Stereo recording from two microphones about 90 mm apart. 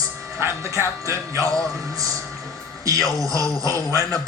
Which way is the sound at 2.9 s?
40° right (ahead or behind).